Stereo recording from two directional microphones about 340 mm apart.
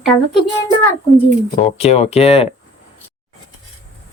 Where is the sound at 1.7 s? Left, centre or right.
Centre.